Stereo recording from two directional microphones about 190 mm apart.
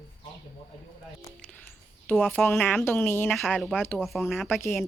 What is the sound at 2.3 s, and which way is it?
Speech, 10° left (ahead or behind).